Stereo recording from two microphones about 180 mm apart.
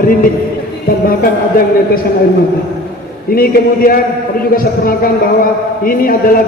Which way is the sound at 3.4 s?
55° left (ahead or behind).